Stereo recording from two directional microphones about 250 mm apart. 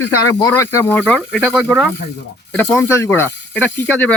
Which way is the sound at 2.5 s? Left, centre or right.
Centre.